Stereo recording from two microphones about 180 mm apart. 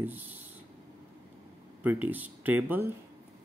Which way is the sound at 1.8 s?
10° right (ahead or behind).